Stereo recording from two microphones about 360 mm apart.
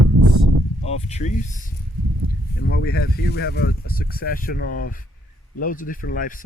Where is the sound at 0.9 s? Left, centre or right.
Centre.